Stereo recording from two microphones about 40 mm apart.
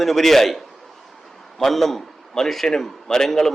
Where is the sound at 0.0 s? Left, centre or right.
Centre.